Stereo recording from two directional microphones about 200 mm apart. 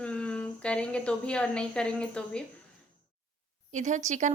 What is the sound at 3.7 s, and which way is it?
Speech, 35° right (ahead or behind).